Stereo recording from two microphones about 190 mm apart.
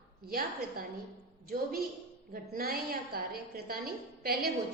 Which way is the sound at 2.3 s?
50° right (ahead or behind).